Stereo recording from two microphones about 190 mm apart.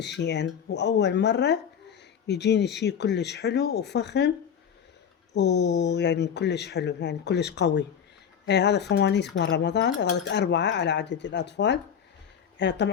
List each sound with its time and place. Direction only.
0.0 s speech: 65° left (ahead or behind)
5.3 s speech: 65° left (ahead or behind)